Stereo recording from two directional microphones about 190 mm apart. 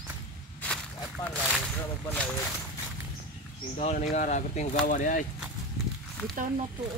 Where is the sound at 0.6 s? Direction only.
5° left (ahead or behind).